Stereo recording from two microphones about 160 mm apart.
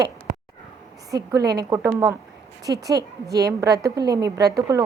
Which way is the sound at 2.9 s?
90° right.